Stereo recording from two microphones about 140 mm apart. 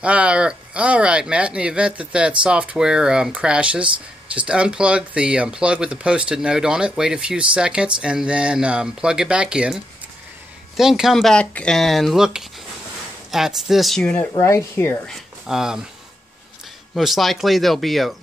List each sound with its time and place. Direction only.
0.0 s speech: 10° right (ahead or behind)
14.3 s speech: 20° left (ahead or behind)
15.0 s speech: centre (ahead or behind)
16.9 s speech: centre (ahead or behind)